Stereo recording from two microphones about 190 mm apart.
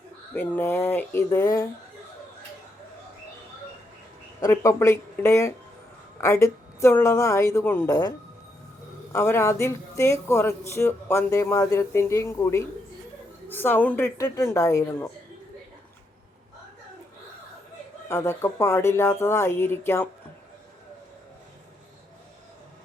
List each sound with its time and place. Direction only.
0.3 s speech: 10° left (ahead or behind)
4.4 s speech: 15° left (ahead or behind)
9.1 s speech: 15° left (ahead or behind)
18.1 s speech: 15° left (ahead or behind)